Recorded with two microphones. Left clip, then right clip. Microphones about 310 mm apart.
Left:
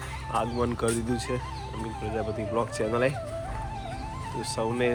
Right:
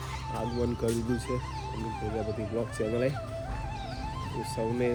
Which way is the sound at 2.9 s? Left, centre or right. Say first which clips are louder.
Left 3 dB; centre.